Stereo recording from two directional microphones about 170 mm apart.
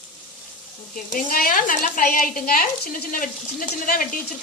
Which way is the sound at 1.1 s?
55° left (ahead or behind).